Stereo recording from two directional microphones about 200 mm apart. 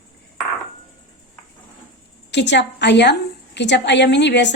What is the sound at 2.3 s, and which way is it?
A woman's voice, 60° left (ahead or behind).